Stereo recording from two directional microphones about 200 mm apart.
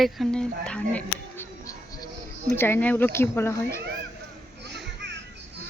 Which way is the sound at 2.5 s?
10° left (ahead or behind).